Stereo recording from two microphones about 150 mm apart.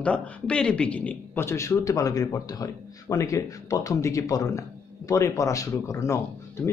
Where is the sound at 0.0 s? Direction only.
5° left (ahead or behind).